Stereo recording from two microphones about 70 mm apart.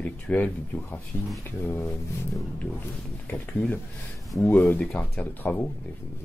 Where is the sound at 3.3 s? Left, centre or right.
Left.